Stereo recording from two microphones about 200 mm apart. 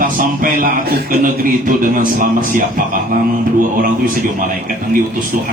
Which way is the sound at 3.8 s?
40° right (ahead or behind).